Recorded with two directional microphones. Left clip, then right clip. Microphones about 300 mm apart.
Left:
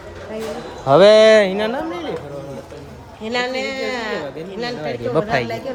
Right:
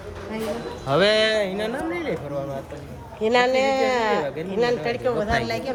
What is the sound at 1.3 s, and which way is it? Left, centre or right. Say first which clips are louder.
Speech: left 10 dB; left.